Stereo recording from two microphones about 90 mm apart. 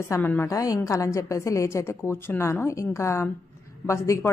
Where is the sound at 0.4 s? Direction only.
40° left (ahead or behind).